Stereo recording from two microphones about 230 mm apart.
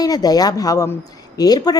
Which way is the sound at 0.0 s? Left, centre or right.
Centre.